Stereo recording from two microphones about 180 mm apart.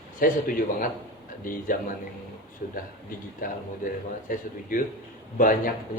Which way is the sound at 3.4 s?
50° left (ahead or behind).